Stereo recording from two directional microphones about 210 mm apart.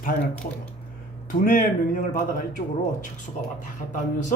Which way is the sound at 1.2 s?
40° left (ahead or behind).